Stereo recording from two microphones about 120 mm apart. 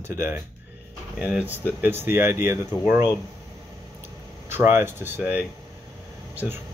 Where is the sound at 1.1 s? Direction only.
10° right (ahead or behind).